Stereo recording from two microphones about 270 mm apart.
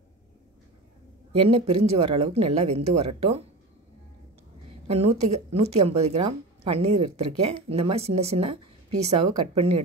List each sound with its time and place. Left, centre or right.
1.3 s speech: centre
4.8 s speech: right